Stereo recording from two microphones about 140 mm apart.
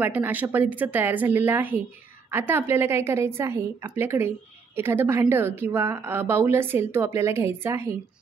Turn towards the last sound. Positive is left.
turn(degrees=-20)  # may be behind; listen again after turning